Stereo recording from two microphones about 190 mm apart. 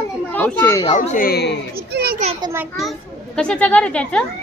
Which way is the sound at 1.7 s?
55° right (ahead or behind).